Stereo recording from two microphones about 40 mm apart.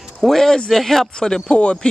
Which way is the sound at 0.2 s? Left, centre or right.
Centre.